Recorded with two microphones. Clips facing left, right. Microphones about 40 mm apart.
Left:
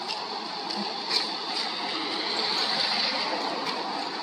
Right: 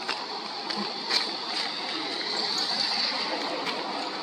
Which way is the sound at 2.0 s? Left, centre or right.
Left.